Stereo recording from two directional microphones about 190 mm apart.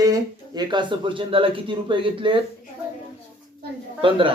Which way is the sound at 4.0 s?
25° right (ahead or behind).